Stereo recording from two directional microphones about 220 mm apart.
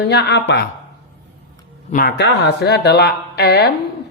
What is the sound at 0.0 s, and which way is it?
Speech, 50° left (ahead or behind).